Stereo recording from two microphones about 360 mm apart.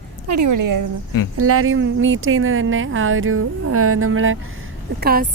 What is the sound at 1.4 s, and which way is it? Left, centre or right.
A woman's voice, right.